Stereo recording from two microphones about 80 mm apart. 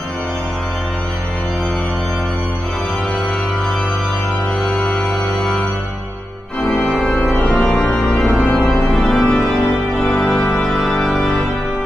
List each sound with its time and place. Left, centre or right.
4.6 s music: centre
6.8 s organ: centre
7.3 s organ: centre
10.0 s music: centre